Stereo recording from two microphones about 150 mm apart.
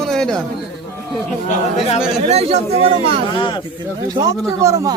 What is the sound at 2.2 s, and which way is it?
Speech, 45° right (ahead or behind).